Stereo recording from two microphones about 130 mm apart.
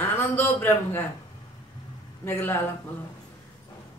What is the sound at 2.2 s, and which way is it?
Speech, 15° left (ahead or behind).